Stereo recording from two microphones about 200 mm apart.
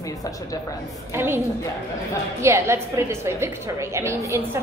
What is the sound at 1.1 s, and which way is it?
Speech, 10° right (ahead or behind).